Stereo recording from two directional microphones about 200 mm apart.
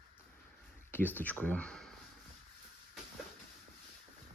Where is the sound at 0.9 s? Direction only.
10° left (ahead or behind).